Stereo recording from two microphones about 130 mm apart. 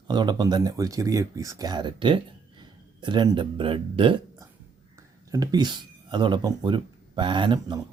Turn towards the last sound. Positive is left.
turn(degrees=-35)  # may be behind; listen again after turning